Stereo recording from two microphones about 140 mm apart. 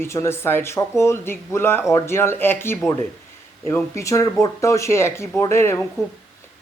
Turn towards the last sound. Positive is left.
turn(degrees=20)  # may be behind; listen again after turning